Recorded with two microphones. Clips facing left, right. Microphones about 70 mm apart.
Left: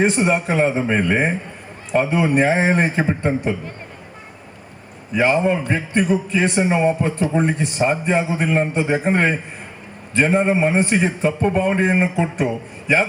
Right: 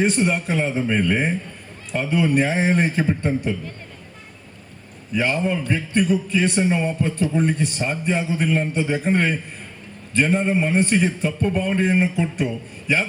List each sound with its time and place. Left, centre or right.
0.1 s a man's voice: centre
5.2 s a man's voice: left
7.4 s a man's voice: centre
7.9 s a man's voice: left
8.7 s a man's voice: centre
11.0 s a man's voice: left